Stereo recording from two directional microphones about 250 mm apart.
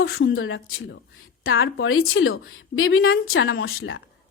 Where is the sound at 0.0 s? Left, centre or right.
Left.